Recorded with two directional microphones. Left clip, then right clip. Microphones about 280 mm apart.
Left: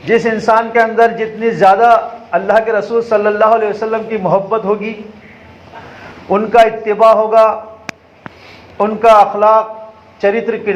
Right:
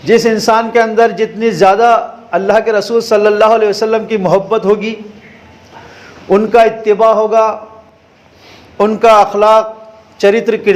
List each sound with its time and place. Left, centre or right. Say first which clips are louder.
0.0 s a man's voice: right 3 dB; right
6.2 s a man's voice: right 1 dB; right
8.8 s a man's voice: right 1 dB; right